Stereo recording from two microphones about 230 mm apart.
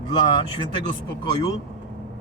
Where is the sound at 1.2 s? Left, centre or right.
Centre.